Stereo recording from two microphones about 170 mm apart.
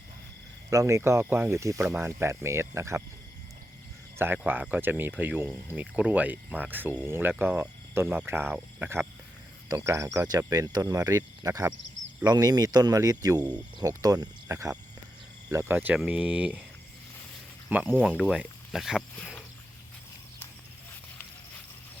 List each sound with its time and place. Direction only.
0.7 s speech: 20° right (ahead or behind)
4.2 s speech: 10° right (ahead or behind)
17.7 s speech: 10° right (ahead or behind)
19.2 s cricket: 5° right (ahead or behind)